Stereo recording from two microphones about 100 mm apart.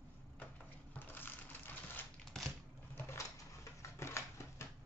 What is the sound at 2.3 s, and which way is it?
Typewriter, 5° left (ahead or behind).